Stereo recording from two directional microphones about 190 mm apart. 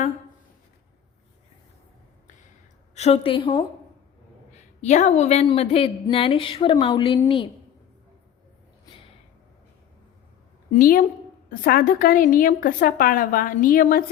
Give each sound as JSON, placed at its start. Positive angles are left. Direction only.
{"t": 2.9, "sound": "a woman's voice", "side_deg": 35}
{"t": 4.5, "sound": "a woman's voice", "side_deg": 40}
{"t": 10.8, "sound": "a woman's voice", "side_deg": 45}